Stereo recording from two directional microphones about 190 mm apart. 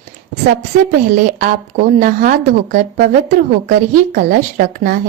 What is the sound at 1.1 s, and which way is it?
A woman's voice, 45° right (ahead or behind).